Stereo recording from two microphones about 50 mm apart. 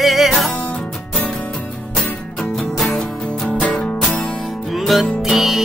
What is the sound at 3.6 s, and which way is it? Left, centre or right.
Music, centre.